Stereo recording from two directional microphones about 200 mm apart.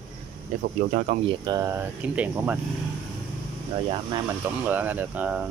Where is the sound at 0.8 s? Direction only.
75° right (ahead or behind).